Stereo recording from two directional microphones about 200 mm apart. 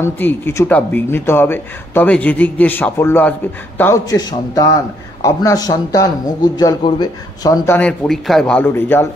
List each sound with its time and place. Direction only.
0.0 s speech: 10° left (ahead or behind)